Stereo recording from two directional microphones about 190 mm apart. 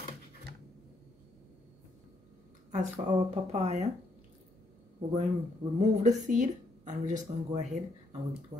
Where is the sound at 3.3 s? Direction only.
35° right (ahead or behind).